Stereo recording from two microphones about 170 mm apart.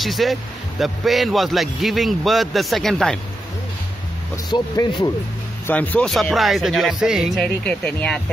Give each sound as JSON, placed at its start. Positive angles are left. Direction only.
{"t": 0.0, "sound": "speech", "side_deg": 0}
{"t": 4.5, "sound": "speech", "side_deg": 25}
{"t": 5.7, "sound": "speech", "side_deg": 10}